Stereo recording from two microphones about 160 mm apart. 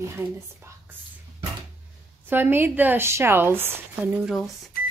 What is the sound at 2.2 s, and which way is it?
Speech, 10° right (ahead or behind).